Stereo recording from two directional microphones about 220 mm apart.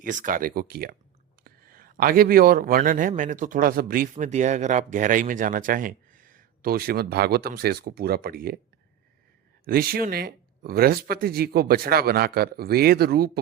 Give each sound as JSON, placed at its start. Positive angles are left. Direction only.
{"t": 0.0, "sound": "a man's voice", "side_deg": -35}
{"t": 9.6, "sound": "speech", "side_deg": -40}